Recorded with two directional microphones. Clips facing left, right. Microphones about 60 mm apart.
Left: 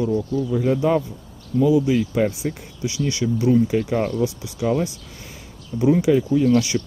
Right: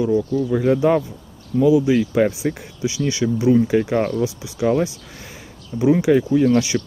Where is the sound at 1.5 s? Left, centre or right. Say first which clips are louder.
Right 2 dB; centre.